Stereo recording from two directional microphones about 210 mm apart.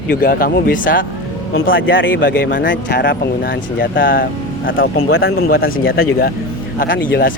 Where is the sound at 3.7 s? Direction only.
40° left (ahead or behind).